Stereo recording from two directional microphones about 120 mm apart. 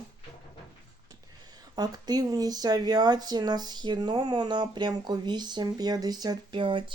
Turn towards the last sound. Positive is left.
turn(degrees=-45)  # may be behind; listen again after turning